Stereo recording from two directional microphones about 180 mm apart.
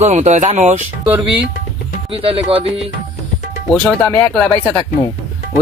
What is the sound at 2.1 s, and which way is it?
Speech, 30° right (ahead or behind).